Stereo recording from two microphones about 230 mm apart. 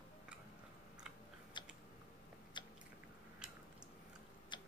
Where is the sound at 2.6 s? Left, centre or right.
Centre.